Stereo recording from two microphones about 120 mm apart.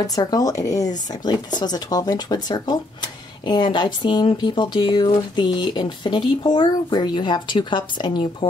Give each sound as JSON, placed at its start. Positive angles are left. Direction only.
{"t": 0.0, "sound": "speech", "side_deg": 30}